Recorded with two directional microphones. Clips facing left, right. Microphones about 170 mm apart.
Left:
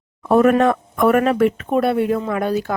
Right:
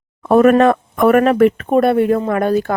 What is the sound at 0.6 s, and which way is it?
Speech, 65° right (ahead or behind).